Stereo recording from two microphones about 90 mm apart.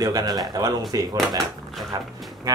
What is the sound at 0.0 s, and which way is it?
Speech, 45° right (ahead or behind).